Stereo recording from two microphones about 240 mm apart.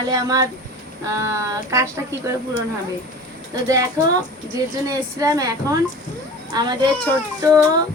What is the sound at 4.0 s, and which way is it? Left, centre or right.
A woman's voice, centre.